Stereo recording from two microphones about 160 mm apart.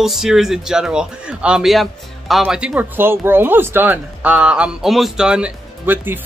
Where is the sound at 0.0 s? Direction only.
Centre (ahead or behind).